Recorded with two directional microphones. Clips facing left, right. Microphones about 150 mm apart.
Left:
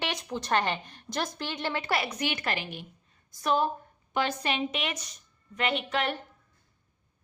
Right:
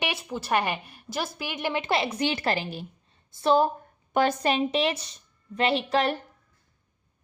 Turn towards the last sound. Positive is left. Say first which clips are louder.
# right 5 dB
turn(degrees=-35)  # may be behind; listen again after turning